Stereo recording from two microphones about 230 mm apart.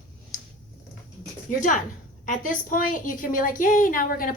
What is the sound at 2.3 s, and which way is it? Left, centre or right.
A woman's voice, left.